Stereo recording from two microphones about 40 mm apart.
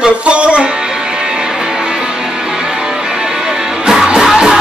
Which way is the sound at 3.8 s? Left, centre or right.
Centre.